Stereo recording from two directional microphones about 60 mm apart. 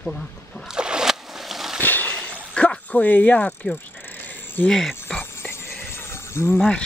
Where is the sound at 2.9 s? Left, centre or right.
Left.